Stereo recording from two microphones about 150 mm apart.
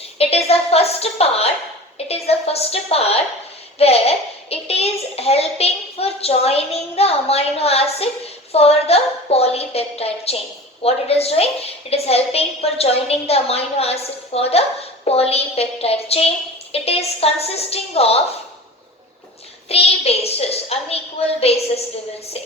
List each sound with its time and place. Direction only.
0.2 s a child's voice: 40° left (ahead or behind)
19.6 s a woman's voice: 40° left (ahead or behind)